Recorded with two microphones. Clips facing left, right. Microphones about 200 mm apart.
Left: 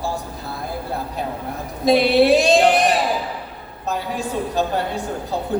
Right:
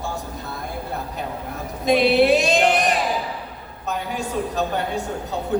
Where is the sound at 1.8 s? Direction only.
35° left (ahead or behind).